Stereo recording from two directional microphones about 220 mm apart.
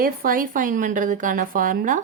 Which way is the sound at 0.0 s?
40° right (ahead or behind).